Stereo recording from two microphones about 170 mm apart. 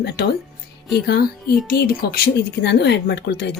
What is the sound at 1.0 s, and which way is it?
Speech, 65° left (ahead or behind).